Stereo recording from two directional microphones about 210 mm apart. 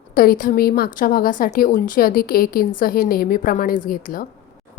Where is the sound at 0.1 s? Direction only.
45° left (ahead or behind).